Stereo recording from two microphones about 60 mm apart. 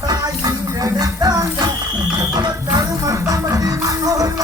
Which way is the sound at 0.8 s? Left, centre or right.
Right.